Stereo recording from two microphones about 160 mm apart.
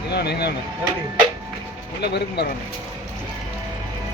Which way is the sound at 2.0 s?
90° left.